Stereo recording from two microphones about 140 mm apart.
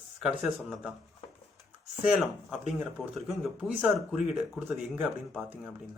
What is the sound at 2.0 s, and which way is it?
Speech, 5° right (ahead or behind).